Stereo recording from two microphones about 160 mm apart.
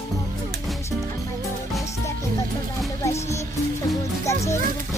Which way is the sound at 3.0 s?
20° left (ahead or behind).